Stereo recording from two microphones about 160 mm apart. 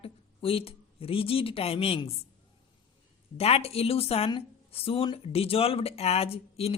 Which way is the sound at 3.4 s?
40° left (ahead or behind).